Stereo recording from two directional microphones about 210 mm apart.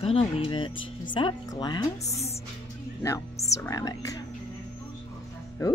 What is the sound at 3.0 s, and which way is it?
Speech, 15° left (ahead or behind).